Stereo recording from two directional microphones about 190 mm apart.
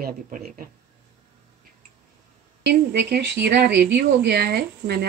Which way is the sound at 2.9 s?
65° right (ahead or behind).